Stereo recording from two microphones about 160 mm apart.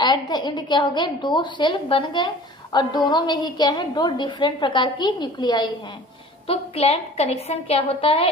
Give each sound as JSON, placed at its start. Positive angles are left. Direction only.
{"t": 0.0, "sound": "a woman's voice", "side_deg": 25}
{"t": 6.4, "sound": "a woman's voice", "side_deg": 40}